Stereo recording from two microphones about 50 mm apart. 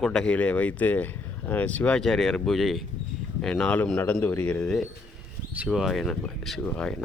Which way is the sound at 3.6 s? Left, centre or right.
Left.